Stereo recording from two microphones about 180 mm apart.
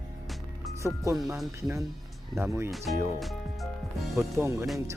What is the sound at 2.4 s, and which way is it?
Speech, 15° right (ahead or behind).